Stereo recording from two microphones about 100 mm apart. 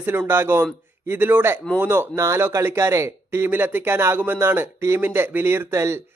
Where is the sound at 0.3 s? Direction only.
25° right (ahead or behind).